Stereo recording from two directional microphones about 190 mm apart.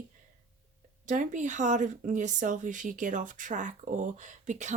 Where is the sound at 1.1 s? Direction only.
40° right (ahead or behind).